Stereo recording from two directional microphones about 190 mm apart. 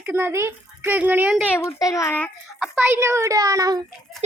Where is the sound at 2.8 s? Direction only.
15° right (ahead or behind).